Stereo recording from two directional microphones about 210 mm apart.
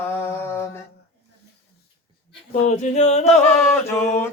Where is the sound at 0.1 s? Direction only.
10° left (ahead or behind).